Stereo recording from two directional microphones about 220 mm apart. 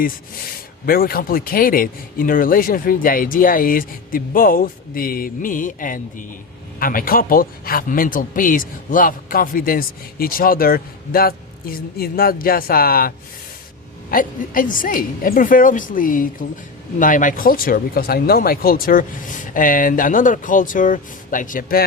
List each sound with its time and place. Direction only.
0.9 s speech: 40° left (ahead or behind)